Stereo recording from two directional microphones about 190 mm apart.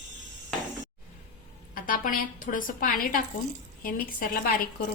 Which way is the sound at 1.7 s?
45° left (ahead or behind).